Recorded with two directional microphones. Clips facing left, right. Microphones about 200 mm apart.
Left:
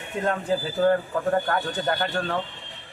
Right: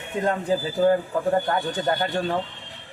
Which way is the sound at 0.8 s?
15° right (ahead or behind).